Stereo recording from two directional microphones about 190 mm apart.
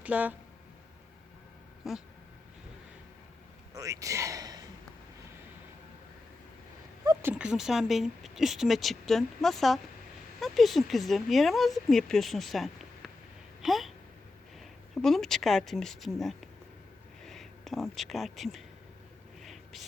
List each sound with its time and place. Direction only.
0.0 s speech: 10° right (ahead or behind)
1.8 s speech: centre (ahead or behind)
3.8 s a man's voice: 15° right (ahead or behind)
7.0 s speech: 15° right (ahead or behind); by 18.6 s centre (ahead or behind)
19.4 s a sound: centre (ahead or behind)